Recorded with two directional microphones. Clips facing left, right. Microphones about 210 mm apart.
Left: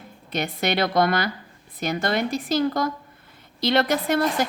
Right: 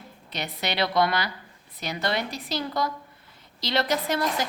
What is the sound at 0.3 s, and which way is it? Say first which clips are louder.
A woman's voice: left 6 dB; 50° left (ahead or behind).